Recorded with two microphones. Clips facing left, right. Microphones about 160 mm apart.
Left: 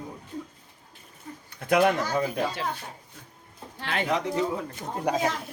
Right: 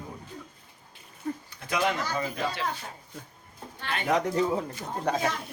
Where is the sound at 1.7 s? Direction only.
55° left (ahead or behind).